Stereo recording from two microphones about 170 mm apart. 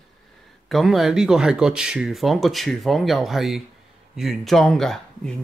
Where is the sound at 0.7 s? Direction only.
Centre (ahead or behind).